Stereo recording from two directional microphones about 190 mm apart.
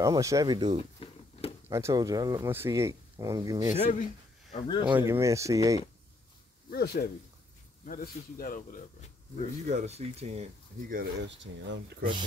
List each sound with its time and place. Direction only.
0.0 s speech: 15° right (ahead or behind)
0.9 s a sound: 30° left (ahead or behind)
1.7 s speech: 15° right (ahead or behind)
3.8 s a sound: 35° left (ahead or behind)
5.0 s speech: 15° right (ahead or behind)
6.7 s speech: 55° left (ahead or behind)
9.7 s speech: 40° right (ahead or behind)
11.0 s speech: 65° right (ahead or behind)
12.0 s speech: 25° right (ahead or behind)